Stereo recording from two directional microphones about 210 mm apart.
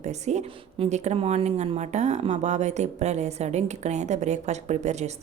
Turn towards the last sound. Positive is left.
turn(degrees=-35)  # may be behind; listen again after turning